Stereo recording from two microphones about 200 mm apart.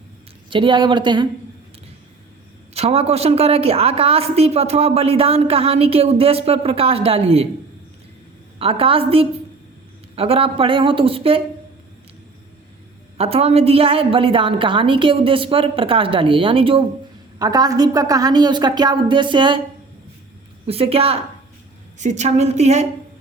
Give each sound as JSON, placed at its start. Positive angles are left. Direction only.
{"t": 0.5, "sound": "a woman's voice", "side_deg": -25}
{"t": 2.7, "sound": "a woman's voice", "side_deg": -30}
{"t": 8.5, "sound": "a woman's voice", "side_deg": -30}
{"t": 13.1, "sound": "a woman's voice", "side_deg": -30}
{"t": 20.7, "sound": "a woman's voice", "side_deg": -30}